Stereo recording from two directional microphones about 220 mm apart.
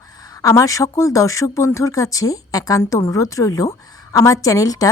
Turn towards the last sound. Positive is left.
turn(degrees=15)  # may be behind; listen again after turning